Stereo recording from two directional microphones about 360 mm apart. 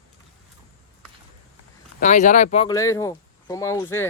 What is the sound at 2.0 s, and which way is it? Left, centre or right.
Speech, centre.